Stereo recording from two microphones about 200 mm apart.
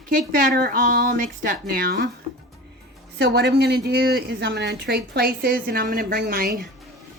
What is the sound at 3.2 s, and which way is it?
A woman's voice, 60° right (ahead or behind).